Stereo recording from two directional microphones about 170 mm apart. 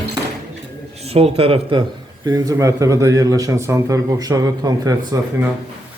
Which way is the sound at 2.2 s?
20° right (ahead or behind).